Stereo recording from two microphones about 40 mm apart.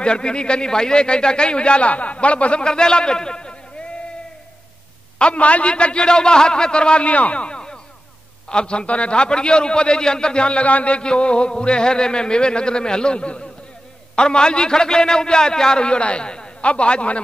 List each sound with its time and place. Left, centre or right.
0.0 s a man's voice: left
2.6 s a man's voice: centre
5.2 s a man's voice: left